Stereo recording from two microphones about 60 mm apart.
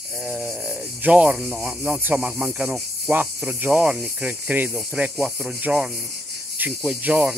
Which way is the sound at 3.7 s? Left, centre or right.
Centre.